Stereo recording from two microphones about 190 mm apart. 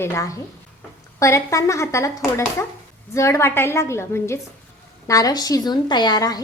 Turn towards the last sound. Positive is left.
turn(degrees=20)  # may be behind; listen again after turning